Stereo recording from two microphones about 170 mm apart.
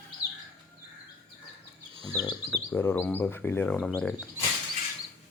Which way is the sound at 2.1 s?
25° left (ahead or behind).